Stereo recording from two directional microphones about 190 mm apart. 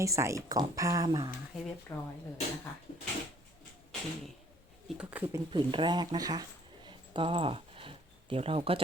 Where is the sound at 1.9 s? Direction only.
15° left (ahead or behind).